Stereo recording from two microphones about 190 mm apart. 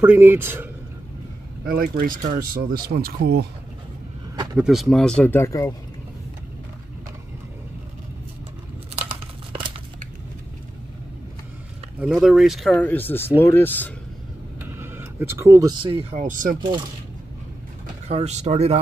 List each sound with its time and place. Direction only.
0.0 s speech: 10° right (ahead or behind)
1.7 s speech: 50° right (ahead or behind)
4.6 s speech: centre (ahead or behind); by 5.8 s 15° left (ahead or behind)
8.9 s crumpling: 30° right (ahead or behind)
12.0 s speech: 5° right (ahead or behind)
14.6 s speech: 10° right (ahead or behind); by 16.5 s 45° right (ahead or behind)
18.0 s speech: 35° right (ahead or behind)